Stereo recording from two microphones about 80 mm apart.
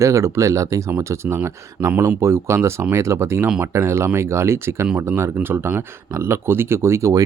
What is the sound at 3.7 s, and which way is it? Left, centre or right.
Speech, right.